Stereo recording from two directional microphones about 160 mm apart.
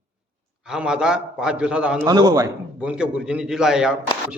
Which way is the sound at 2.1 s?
25° right (ahead or behind).